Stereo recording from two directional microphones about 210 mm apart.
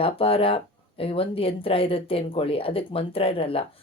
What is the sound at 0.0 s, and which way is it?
Speech, 25° left (ahead or behind).